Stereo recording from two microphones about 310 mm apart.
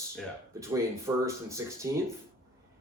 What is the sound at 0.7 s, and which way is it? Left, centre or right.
Speech, centre.